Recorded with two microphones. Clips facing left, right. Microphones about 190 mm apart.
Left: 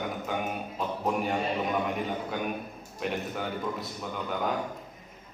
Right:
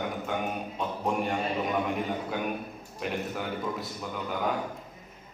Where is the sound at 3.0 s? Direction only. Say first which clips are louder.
Even; centre (ahead or behind).